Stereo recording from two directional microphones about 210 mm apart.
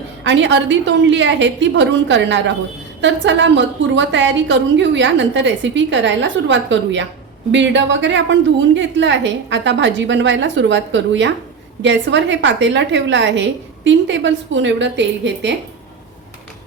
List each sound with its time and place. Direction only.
0.2 s a woman's voice: 60° right (ahead or behind)